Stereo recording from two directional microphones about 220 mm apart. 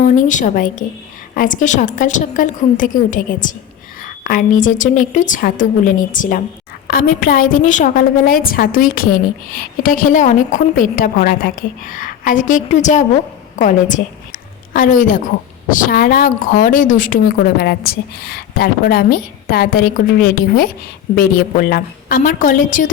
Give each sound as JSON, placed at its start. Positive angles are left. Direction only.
{"t": 0.0, "sound": "a woman's voice", "side_deg": 35}